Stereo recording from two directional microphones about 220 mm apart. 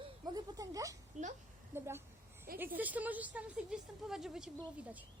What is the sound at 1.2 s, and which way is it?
Speech, 35° right (ahead or behind).